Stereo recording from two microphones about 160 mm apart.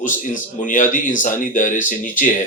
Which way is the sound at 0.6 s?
55° left (ahead or behind).